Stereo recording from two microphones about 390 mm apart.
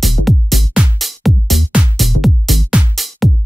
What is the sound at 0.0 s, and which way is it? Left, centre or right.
Music, centre.